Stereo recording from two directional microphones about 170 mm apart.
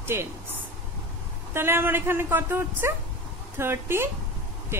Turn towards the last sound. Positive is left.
turn(degrees=-15)  # may be behind; listen again after turning